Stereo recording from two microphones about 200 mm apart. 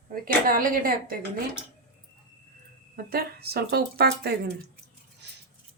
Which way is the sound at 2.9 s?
50° right (ahead or behind).